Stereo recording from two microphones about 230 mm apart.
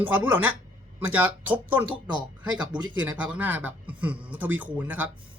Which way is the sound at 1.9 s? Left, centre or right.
Centre.